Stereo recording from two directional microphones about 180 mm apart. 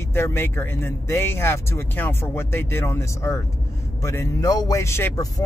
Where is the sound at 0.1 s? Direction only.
15° left (ahead or behind).